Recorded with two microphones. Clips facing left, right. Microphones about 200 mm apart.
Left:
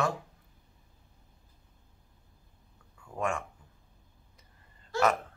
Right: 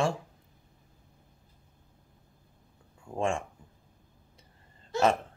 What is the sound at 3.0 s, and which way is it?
Speech, 25° right (ahead or behind).